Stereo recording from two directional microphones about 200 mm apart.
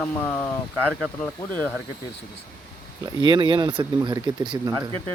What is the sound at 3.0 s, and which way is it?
Speech, 20° right (ahead or behind).